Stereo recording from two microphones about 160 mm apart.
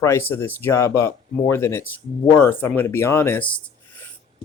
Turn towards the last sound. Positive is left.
turn(degrees=10)  # may be behind; listen again after turning